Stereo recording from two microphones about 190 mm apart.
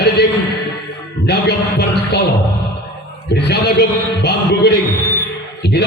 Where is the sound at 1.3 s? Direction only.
60° left (ahead or behind).